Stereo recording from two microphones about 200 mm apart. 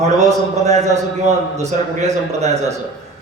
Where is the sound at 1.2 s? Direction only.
35° right (ahead or behind).